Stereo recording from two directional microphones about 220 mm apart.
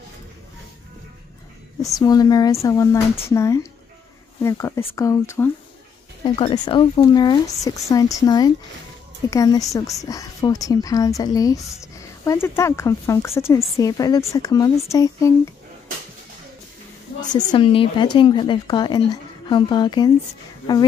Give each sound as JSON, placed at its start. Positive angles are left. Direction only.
{"t": 2.0, "sound": "speech", "side_deg": 15}
{"t": 17.2, "sound": "a woman's voice", "side_deg": 35}
{"t": 17.5, "sound": "speech", "side_deg": 25}